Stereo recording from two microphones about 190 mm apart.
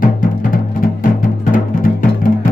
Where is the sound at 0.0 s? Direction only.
45° left (ahead or behind).